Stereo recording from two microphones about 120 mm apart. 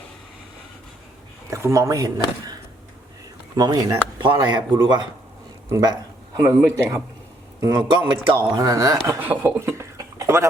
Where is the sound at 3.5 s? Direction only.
30° right (ahead or behind).